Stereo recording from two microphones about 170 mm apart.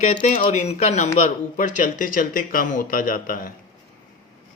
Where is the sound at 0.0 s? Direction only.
45° left (ahead or behind).